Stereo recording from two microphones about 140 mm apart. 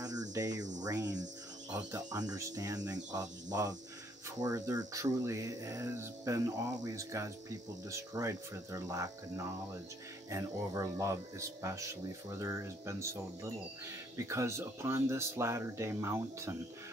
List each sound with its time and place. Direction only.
0.0 s cricket: 25° right (ahead or behind)
0.8 s speech: 25° right (ahead or behind)
10.3 s speech: 25° right (ahead or behind)